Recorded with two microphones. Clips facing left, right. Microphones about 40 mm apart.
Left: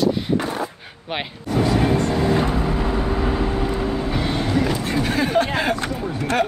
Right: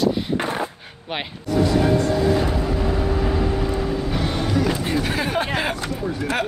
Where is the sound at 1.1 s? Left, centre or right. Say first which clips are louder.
Left 1 dB; centre.